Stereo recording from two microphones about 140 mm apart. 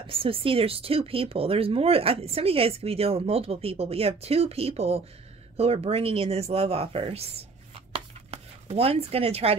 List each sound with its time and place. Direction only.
0.0 s speech: 40° right (ahead or behind)
7.9 s chopping: 45° right (ahead or behind)